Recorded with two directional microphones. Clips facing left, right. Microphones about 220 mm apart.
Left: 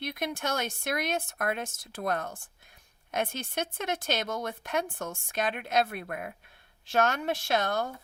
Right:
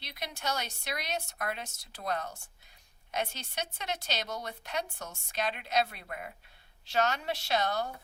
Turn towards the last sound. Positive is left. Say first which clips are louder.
# left 2 dB
turn(degrees=50)  # may be behind; listen again after turning